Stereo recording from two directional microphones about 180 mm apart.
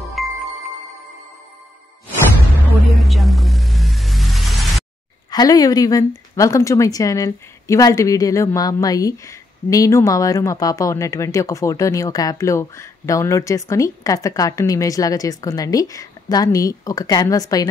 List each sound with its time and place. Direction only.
0.2 s music: centre (ahead or behind)
3.0 s a sound: centre (ahead or behind)
5.3 s a woman's voice: 20° left (ahead or behind)